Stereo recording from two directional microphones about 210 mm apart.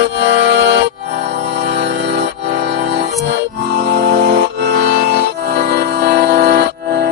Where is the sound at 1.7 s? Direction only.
50° right (ahead or behind).